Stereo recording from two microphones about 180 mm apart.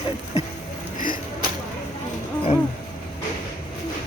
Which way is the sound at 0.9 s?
50° left (ahead or behind).